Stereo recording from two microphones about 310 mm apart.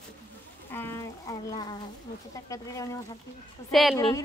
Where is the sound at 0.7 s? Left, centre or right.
Centre.